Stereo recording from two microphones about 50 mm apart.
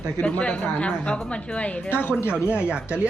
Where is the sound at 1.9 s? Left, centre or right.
Left.